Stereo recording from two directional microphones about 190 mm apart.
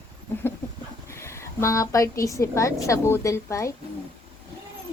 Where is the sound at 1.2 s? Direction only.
15° left (ahead or behind).